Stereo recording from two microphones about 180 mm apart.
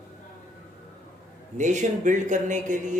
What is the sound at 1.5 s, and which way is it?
A man's voice, 40° right (ahead or behind).